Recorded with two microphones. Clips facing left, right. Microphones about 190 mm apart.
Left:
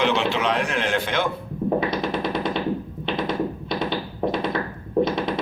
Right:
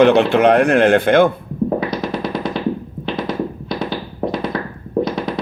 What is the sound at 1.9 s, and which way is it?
Music, 20° left (ahead or behind).